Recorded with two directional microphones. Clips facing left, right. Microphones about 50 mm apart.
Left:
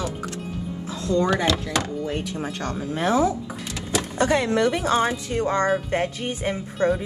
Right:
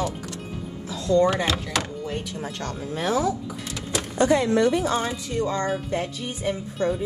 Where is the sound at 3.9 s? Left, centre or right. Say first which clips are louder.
Right 1 dB; left.